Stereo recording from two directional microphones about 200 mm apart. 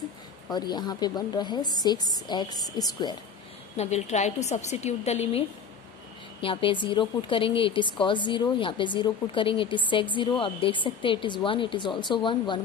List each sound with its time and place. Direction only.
0.5 s a woman's voice: 20° left (ahead or behind)
3.7 s a woman's voice: 35° left (ahead or behind)
6.4 s a woman's voice: 25° left (ahead or behind)